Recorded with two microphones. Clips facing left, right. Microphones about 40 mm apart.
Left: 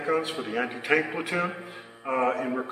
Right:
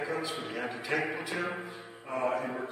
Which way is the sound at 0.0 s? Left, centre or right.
Left.